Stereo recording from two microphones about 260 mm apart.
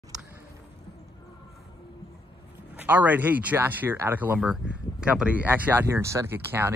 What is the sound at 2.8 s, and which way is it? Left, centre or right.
Speech, centre.